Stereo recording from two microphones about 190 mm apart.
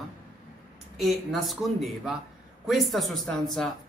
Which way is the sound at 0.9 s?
Centre (ahead or behind).